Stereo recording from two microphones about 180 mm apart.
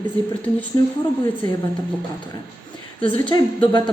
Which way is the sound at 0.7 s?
20° left (ahead or behind).